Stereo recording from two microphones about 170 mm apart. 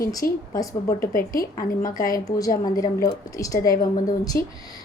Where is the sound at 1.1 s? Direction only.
55° left (ahead or behind).